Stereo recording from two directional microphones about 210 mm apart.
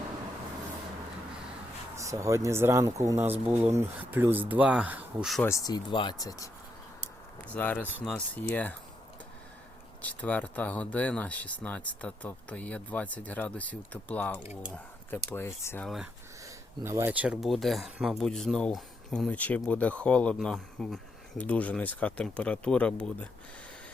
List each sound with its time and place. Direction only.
2.0 s speech: 15° right (ahead or behind)
5.5 s speech: 15° left (ahead or behind)
10.0 s speech: 5° left (ahead or behind)
16.8 s speech: 10° right (ahead or behind); by 23.3 s 5° left (ahead or behind)